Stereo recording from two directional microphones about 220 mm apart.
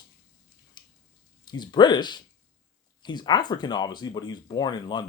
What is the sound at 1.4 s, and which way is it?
Speech, 20° left (ahead or behind).